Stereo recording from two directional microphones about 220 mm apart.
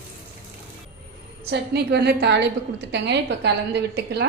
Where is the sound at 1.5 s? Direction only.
50° right (ahead or behind).